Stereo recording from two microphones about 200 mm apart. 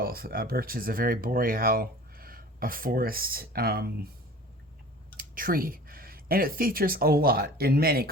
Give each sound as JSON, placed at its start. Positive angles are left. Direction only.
{"t": 0.0, "sound": "speech", "side_deg": -50}
{"t": 5.1, "sound": "speech", "side_deg": -45}